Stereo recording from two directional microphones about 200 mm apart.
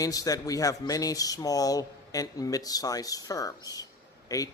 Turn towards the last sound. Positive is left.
turn(degrees=20)  # may be behind; listen again after turning